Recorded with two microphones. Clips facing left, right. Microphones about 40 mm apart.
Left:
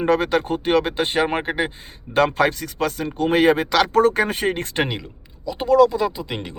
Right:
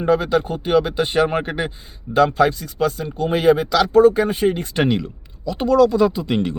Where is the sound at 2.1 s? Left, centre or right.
Left.